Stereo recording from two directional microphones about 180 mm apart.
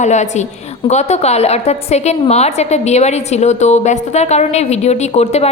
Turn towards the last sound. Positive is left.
turn(degrees=35)  # may be behind; listen again after turning